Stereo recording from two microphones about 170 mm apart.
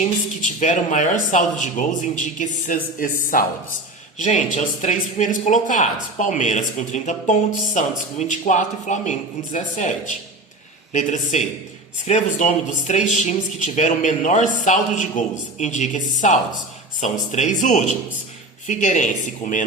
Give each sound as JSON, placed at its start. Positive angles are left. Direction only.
{"t": 0.0, "sound": "speech", "side_deg": 45}
{"t": 10.9, "sound": "speech", "side_deg": 45}